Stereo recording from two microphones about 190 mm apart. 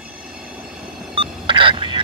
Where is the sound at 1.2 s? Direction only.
25° right (ahead or behind).